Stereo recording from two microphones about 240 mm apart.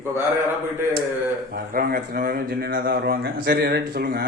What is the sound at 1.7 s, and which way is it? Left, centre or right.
Speech, right.